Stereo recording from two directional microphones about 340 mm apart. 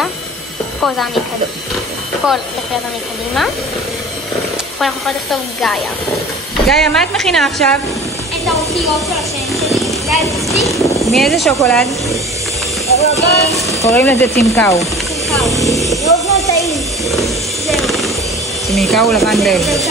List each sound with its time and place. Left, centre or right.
0.8 s speech: centre
2.2 s speech: centre
4.7 s speech: centre
9.5 s a sound: centre
10.6 s speech: centre
12.9 s speech: centre
13.7 s frying: centre
14.4 s a sound: centre
18.7 s speech: centre